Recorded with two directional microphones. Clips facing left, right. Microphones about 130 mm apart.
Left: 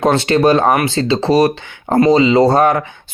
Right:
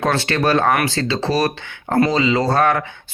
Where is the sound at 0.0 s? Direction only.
25° left (ahead or behind).